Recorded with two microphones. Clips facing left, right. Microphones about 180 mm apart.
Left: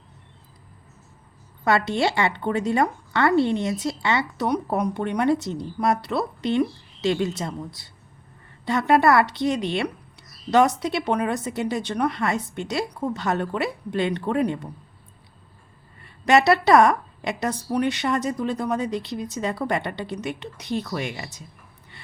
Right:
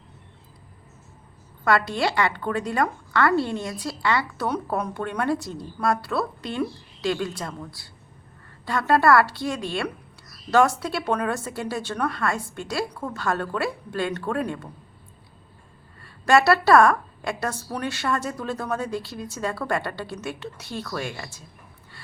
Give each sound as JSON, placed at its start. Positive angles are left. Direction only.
{"t": 1.6, "sound": "a woman's voice", "side_deg": 25}
{"t": 16.2, "sound": "a woman's voice", "side_deg": 20}